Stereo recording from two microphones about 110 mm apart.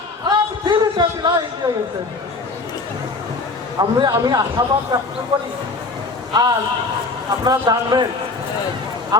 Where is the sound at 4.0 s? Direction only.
40° right (ahead or behind).